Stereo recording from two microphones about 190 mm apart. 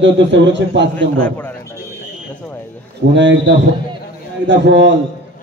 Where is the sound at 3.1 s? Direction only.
70° right (ahead or behind).